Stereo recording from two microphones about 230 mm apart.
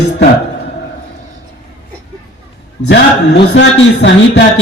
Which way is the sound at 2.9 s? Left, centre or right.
Left.